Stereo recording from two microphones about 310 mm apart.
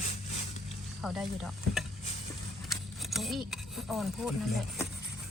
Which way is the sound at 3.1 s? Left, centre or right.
Centre.